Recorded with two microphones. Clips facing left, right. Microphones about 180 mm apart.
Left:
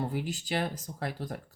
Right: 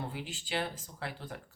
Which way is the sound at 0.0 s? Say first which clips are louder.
Left 7 dB; 40° left (ahead or behind).